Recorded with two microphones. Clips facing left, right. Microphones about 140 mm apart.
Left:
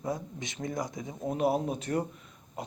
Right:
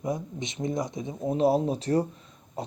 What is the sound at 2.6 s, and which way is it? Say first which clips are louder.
Pig: right 4 dB; 35° right (ahead or behind).